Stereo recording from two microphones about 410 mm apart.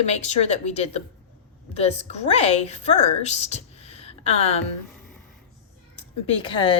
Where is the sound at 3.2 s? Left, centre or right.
Centre.